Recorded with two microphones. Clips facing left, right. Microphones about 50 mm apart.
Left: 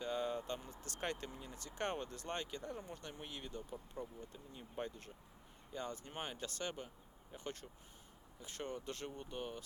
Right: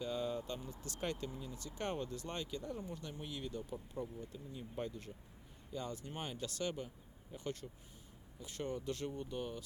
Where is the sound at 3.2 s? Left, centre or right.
Left.